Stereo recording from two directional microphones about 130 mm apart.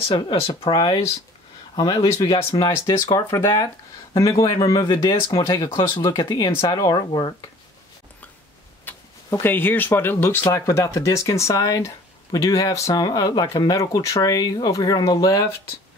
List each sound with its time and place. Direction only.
0.1 s speech: 35° left (ahead or behind)
0.7 s speech: 30° left (ahead or behind)
8.8 s speech: 15° left (ahead or behind)